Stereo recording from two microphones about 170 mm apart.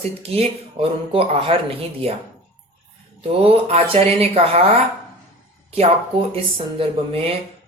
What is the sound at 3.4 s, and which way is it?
Speech, 35° right (ahead or behind).